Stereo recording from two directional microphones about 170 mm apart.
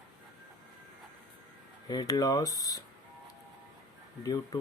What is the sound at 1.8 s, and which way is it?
Speech, 20° left (ahead or behind).